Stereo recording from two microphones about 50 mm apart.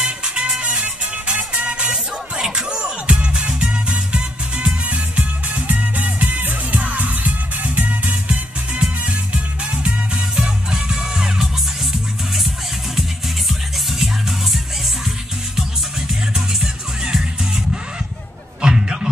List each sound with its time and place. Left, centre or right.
0.0 s music: centre
13.5 s music: centre
16.3 s music: centre
18.6 s a sound: centre